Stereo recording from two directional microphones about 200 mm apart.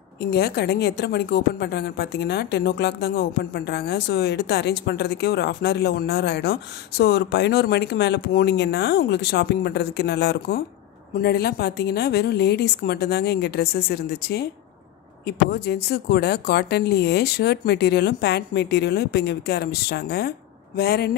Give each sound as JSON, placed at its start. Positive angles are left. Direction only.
{"t": 0.2, "sound": "a woman's voice", "side_deg": 55}